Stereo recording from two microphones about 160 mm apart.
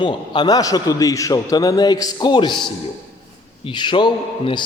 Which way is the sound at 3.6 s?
30° left (ahead or behind).